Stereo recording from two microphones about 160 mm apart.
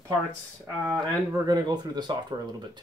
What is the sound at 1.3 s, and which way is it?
Speech, 25° right (ahead or behind).